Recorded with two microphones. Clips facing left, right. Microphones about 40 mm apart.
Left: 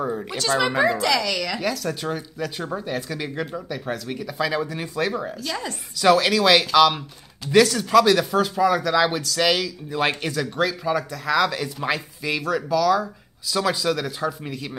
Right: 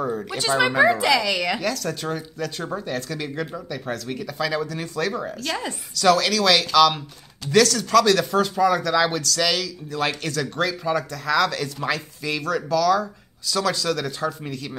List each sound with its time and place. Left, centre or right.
0.0 s a sound: centre
0.4 s speech: centre
1.6 s speech: centre
5.1 s speech: centre
5.9 s speech: centre